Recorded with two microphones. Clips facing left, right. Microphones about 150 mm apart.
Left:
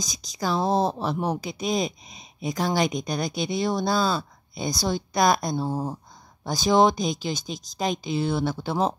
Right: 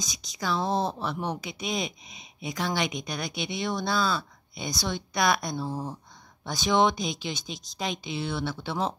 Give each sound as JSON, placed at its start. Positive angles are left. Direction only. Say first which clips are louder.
{"t": 0.0, "sound": "speech", "louder": "left 4 dB", "side_deg": 40}